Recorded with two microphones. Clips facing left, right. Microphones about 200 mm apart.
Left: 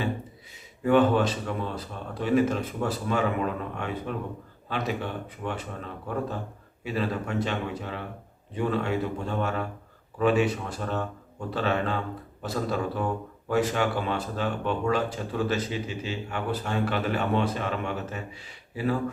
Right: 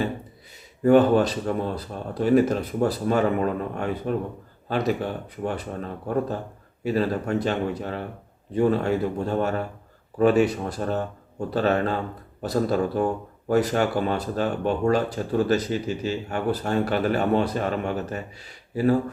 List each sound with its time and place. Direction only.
0.9 s speech: 40° right (ahead or behind)